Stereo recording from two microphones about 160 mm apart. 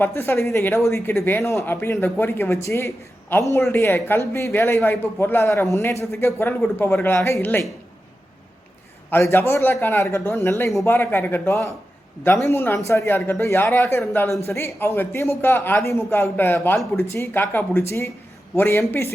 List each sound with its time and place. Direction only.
0.0 s speech: 15° left (ahead or behind)
9.0 s speech: 15° left (ahead or behind)